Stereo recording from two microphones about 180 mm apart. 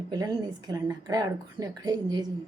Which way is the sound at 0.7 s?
20° right (ahead or behind).